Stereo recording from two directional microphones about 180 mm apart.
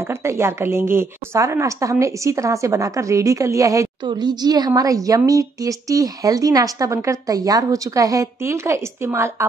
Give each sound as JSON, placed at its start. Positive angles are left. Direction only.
{"t": 0.0, "sound": "speech", "side_deg": -15}